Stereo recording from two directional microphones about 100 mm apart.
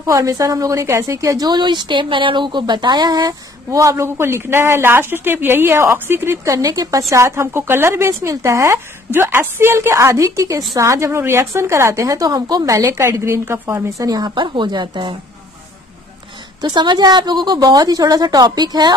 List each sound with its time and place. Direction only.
0.0 s a woman's voice: 35° right (ahead or behind); by 15.1 s 50° right (ahead or behind)
16.6 s a woman's voice: 45° right (ahead or behind)